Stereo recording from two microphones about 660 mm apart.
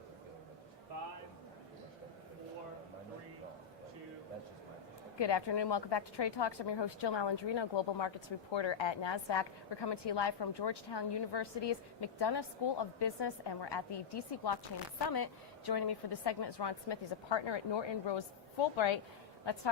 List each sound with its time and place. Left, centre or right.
5.2 s a woman's voice: left
19.5 s a woman's voice: left